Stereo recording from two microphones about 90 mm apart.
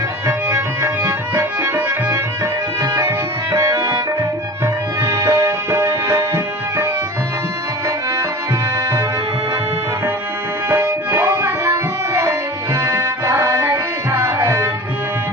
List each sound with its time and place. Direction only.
0.5 s music: 20° right (ahead or behind)
2.9 s music: 30° right (ahead or behind)
10.7 s music: 25° right (ahead or behind)
12.1 s tabla: 30° right (ahead or behind)